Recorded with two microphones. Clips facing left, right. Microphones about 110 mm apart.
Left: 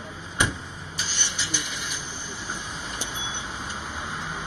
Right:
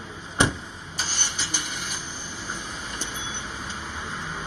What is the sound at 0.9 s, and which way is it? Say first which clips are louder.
Vehicle: right 1 dB; 45° right (ahead or behind).